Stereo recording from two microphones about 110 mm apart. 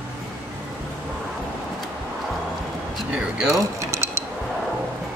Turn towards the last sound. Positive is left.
turn(degrees=-25)  # may be behind; listen again after turning